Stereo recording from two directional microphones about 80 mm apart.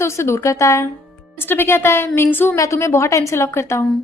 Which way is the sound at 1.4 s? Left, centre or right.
Left.